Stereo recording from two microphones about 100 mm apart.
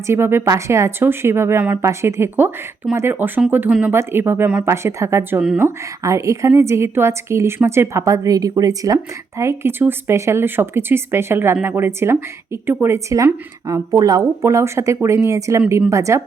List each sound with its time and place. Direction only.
0.1 s a woman's voice: 25° right (ahead or behind)
9.4 s a woman's voice: 25° right (ahead or behind)
13.9 s a woman's voice: 35° right (ahead or behind)